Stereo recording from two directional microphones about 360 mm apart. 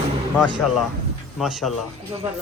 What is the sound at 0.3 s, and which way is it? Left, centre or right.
A man's voice, centre.